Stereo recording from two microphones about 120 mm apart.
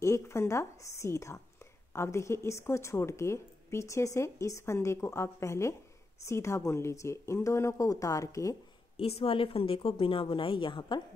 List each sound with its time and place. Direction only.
0.0 s a woman's voice: 25° left (ahead or behind)
8.9 s speech: 55° left (ahead or behind)